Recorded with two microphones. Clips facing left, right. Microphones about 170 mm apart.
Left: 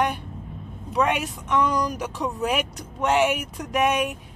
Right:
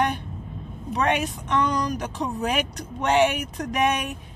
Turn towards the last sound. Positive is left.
turn(degrees=5)  # may be behind; listen again after turning